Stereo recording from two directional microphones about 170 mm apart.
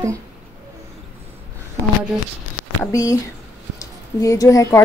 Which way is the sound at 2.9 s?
20° left (ahead or behind).